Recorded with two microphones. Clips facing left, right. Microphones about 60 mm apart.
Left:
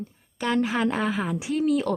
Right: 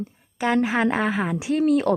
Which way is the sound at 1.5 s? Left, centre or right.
Right.